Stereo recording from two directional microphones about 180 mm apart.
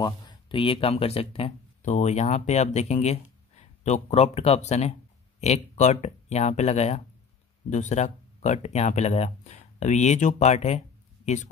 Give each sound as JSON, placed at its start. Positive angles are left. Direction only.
{"t": 0.0, "sound": "speech", "side_deg": 25}